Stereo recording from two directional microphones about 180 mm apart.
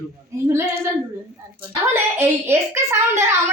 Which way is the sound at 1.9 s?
15° right (ahead or behind).